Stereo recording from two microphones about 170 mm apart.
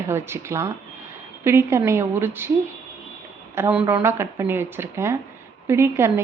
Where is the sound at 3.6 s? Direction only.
10° right (ahead or behind).